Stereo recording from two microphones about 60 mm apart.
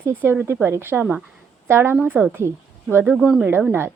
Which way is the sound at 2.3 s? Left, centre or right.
Right.